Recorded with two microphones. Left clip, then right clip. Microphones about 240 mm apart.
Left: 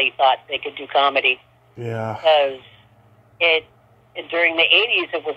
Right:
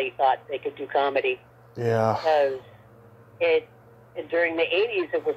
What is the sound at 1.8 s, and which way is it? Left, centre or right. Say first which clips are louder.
Speech: right 4 dB; centre.